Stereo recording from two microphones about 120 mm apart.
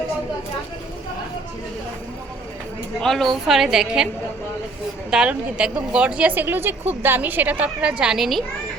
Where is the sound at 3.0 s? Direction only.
Centre (ahead or behind).